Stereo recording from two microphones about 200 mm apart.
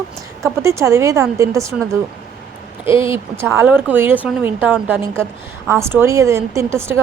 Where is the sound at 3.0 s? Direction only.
15° right (ahead or behind).